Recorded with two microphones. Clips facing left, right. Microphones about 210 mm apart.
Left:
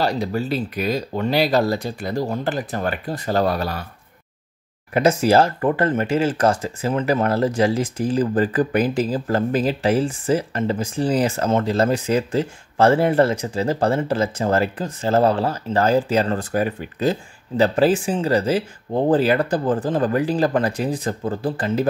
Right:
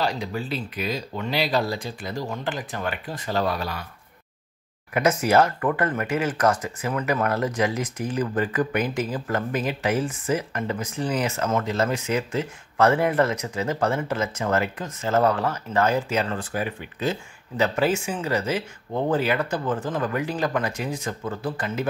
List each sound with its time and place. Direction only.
0.0 s speech: 40° left (ahead or behind)
4.9 s speech: 30° left (ahead or behind)